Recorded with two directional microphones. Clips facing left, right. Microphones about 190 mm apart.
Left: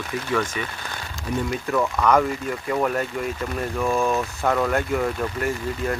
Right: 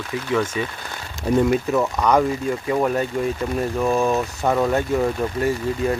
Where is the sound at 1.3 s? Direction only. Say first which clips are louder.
Right 8 dB; 45° right (ahead or behind).